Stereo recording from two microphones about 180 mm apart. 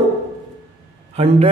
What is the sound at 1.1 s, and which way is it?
Speech, 35° right (ahead or behind).